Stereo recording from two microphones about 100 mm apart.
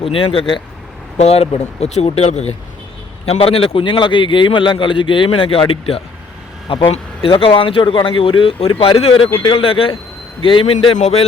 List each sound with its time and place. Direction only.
0.0 s a man's voice: 65° left (ahead or behind)
1.2 s speech: 90° left; by 8.7 s 60° left (ahead or behind)
8.8 s a man's voice: 75° left (ahead or behind)